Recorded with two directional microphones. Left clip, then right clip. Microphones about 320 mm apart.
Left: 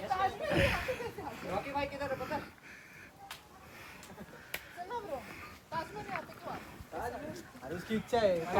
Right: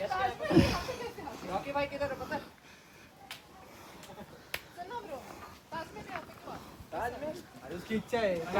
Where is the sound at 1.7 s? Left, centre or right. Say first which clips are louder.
Right 2 dB; centre.